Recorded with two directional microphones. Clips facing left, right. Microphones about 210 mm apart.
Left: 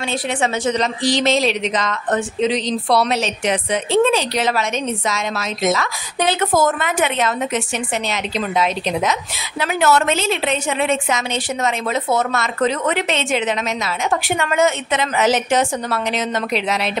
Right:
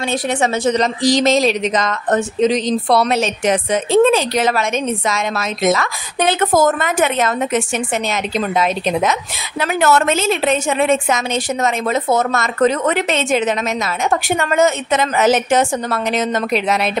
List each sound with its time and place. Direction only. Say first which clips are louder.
0.1 s speech: right 3 dB; 45° right (ahead or behind)